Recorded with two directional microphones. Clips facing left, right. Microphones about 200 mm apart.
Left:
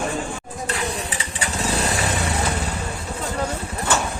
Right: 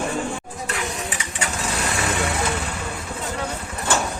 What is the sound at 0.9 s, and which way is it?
Engine, 35° left (ahead or behind).